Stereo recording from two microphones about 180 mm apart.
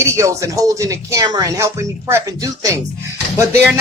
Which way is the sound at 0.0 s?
15° right (ahead or behind).